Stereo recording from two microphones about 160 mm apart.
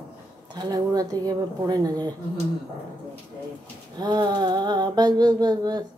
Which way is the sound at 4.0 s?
25° right (ahead or behind).